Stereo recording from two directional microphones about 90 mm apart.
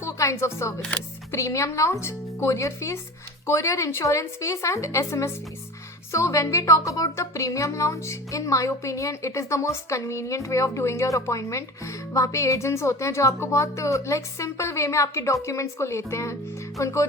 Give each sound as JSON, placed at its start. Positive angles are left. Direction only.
{"t": 0.0, "sound": "camera", "side_deg": 35}
{"t": 1.3, "sound": "a woman's voice", "side_deg": 35}